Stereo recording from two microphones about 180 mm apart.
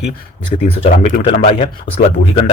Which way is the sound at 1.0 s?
35° left (ahead or behind).